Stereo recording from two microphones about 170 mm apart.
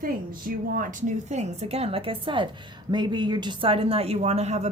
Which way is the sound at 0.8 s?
45° right (ahead or behind).